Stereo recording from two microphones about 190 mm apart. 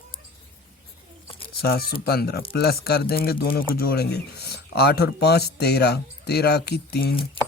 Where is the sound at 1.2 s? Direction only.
30° left (ahead or behind).